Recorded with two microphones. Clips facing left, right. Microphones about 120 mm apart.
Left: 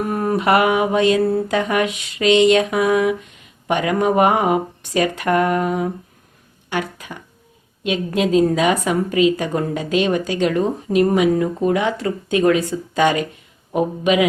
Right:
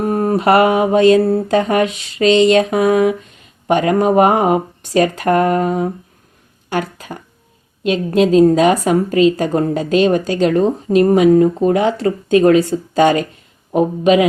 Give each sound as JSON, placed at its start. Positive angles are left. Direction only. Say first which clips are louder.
{"t": 0.0, "sound": "a woman's voice", "louder": "right 4 dB", "side_deg": -30}